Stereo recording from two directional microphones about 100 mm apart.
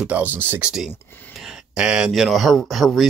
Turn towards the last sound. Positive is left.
turn(degrees=0)  # may be behind; listen again after turning